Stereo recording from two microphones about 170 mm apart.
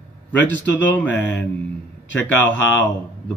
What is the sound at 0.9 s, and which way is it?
Speech, 10° left (ahead or behind).